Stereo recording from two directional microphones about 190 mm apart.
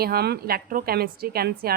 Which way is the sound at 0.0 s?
55° right (ahead or behind).